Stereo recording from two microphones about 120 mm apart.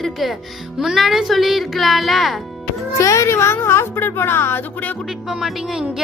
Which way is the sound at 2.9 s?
25° left (ahead or behind).